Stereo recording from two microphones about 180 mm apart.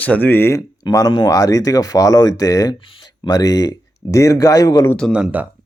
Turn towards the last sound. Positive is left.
turn(degrees=-5)  # may be behind; listen again after turning